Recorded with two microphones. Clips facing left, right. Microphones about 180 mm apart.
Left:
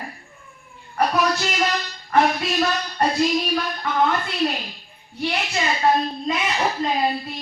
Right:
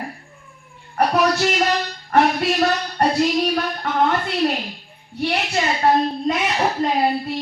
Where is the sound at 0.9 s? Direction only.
60° right (ahead or behind).